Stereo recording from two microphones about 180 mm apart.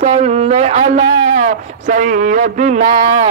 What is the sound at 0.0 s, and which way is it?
Speech, 40° right (ahead or behind).